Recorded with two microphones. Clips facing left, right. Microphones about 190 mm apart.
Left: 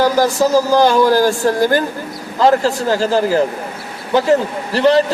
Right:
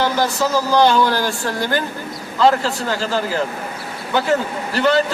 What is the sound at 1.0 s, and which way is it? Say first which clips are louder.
A man's voice: left 7 dB; 40° left (ahead or behind).